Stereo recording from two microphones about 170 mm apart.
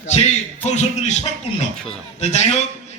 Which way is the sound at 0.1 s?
40° left (ahead or behind).